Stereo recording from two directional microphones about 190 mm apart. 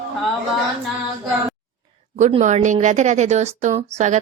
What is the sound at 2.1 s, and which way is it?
A woman's voice, 40° right (ahead or behind).